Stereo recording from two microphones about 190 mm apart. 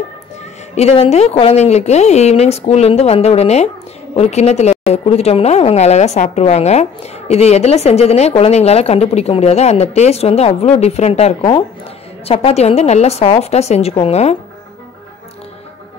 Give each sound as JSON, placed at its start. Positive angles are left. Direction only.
{"t": 0.7, "sound": "a woman's voice", "side_deg": 30}